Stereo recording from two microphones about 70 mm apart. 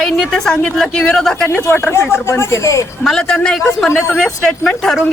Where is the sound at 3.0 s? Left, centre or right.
Centre.